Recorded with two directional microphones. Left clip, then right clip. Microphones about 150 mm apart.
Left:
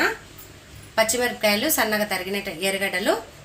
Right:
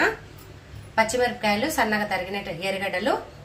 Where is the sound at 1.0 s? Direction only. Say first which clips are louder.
Left 1 dB; 50° left (ahead or behind).